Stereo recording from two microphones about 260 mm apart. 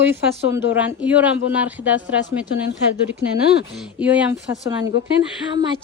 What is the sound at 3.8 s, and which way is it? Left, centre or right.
Speech, centre.